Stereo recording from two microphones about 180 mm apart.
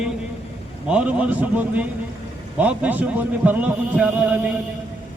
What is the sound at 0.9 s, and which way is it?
A man's voice, 5° right (ahead or behind).